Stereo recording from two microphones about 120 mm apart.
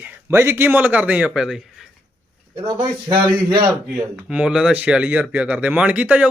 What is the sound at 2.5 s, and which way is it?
A man's voice, 40° right (ahead or behind).